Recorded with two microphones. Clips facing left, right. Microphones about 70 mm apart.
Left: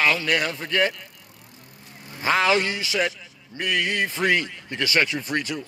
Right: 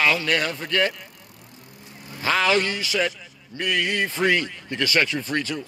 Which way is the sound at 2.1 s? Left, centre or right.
Centre.